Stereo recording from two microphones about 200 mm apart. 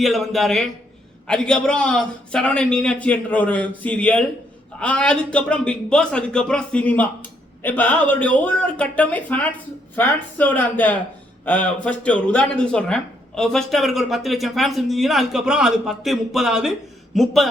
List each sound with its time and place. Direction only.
0.0 s a man's voice: centre (ahead or behind)